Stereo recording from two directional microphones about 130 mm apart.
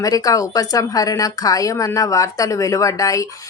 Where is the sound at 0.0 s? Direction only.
25° left (ahead or behind).